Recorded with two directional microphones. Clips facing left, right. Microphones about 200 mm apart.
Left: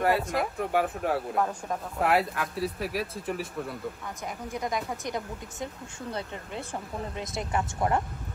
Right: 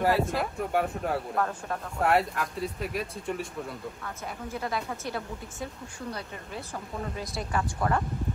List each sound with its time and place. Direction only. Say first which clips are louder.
0.0 s speech: even; centre (ahead or behind)
4.0 s a woman's voice: left 1 dB; 15° left (ahead or behind)